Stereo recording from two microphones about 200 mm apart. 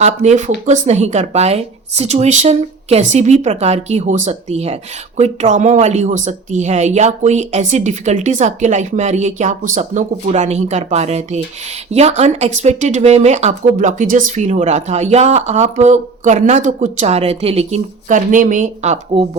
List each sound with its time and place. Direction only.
0.0 s a woman's voice: 35° right (ahead or behind)